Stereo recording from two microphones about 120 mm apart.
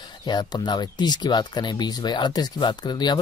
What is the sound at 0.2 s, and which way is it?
Speech, 35° left (ahead or behind).